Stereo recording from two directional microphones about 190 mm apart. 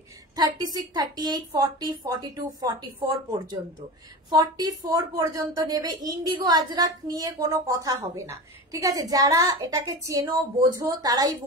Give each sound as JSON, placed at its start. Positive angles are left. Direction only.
{"t": 0.4, "sound": "a woman's voice", "side_deg": -20}